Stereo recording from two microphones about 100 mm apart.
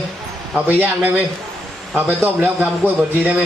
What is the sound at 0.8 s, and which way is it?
A man's voice, 15° right (ahead or behind).